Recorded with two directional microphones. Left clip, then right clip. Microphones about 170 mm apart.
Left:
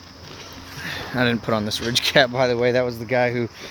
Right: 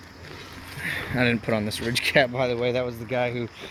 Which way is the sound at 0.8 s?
Centre (ahead or behind).